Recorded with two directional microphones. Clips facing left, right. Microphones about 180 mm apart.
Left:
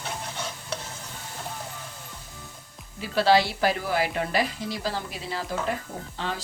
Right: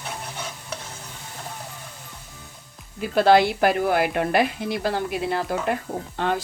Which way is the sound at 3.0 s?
55° right (ahead or behind).